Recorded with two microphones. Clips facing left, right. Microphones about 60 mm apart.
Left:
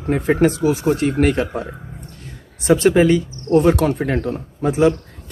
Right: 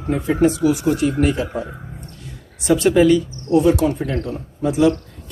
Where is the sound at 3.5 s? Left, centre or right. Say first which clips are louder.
Left 1 dB; left.